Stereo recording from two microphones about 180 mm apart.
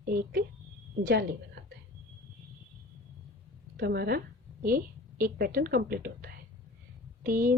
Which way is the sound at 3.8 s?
60° right (ahead or behind).